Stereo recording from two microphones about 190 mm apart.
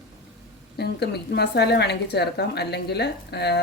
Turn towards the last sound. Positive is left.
turn(degrees=60)  # may be behind; listen again after turning